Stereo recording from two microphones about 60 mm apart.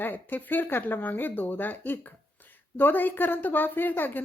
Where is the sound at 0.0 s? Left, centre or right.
Left.